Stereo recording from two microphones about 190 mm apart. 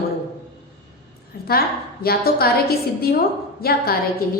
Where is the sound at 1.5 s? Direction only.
55° left (ahead or behind).